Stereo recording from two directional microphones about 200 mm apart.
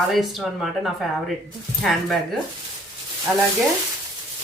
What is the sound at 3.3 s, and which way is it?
Stir, 10° right (ahead or behind).